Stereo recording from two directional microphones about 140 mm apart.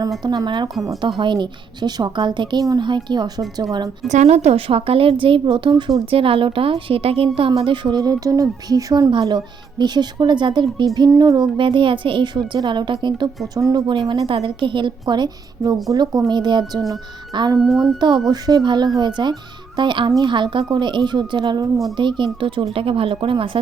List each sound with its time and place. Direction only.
0.2 s a woman's voice: 30° right (ahead or behind)
4.1 s a woman's voice: 50° right (ahead or behind); by 13.8 s 25° right (ahead or behind)
13.8 s a woman's voice: 35° right (ahead or behind)
17.6 s a sound: centre (ahead or behind)
18.3 s a woman's voice: 30° right (ahead or behind)